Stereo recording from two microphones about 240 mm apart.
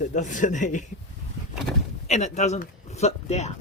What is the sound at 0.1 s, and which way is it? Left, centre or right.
Speech, left.